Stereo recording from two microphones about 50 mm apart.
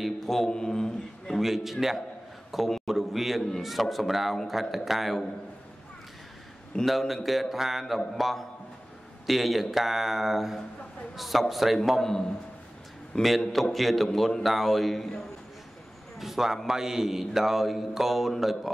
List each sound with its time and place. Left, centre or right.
0.0 s a man's voice: centre
1.4 s a man's voice: centre
6.9 s a man's voice: centre
12.0 s a man's voice: centre
13.5 s a man's voice: centre